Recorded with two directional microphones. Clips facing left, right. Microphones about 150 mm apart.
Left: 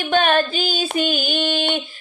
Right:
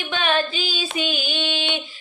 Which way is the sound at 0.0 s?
45° left (ahead or behind).